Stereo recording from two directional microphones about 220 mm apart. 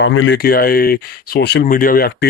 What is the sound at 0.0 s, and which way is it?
Speech, 60° left (ahead or behind).